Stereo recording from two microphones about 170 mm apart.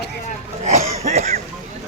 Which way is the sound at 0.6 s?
40° right (ahead or behind).